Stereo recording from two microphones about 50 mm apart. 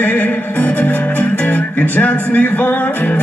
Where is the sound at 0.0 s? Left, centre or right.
Left.